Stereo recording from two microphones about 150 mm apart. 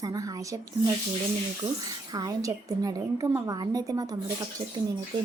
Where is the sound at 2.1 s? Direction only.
25° right (ahead or behind).